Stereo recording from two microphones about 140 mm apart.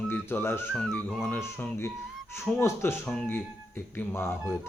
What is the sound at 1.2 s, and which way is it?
Speech, 15° left (ahead or behind).